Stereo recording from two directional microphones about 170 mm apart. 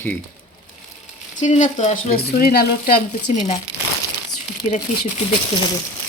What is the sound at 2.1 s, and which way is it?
Speech, 65° left (ahead or behind).